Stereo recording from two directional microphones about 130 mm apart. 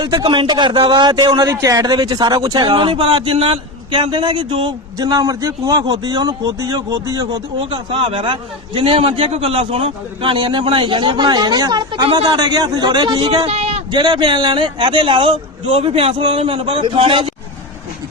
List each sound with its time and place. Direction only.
0.0 s a man's voice: 35° right (ahead or behind)
4.9 s a man's voice: 30° right (ahead or behind)
7.6 s a man's voice: 40° right (ahead or behind)
13.4 s speech: 55° right (ahead or behind)
13.9 s a man's voice: 35° right (ahead or behind)